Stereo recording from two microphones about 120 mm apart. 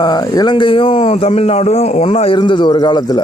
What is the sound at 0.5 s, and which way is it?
Speech, 45° left (ahead or behind).